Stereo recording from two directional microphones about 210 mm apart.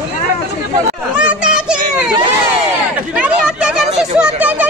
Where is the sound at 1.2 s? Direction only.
5° right (ahead or behind).